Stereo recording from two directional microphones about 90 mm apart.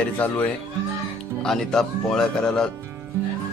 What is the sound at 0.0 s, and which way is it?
Speech, 20° left (ahead or behind).